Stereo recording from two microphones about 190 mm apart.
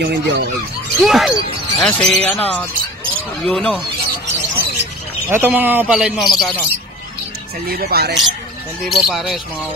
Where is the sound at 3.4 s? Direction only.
5° left (ahead or behind).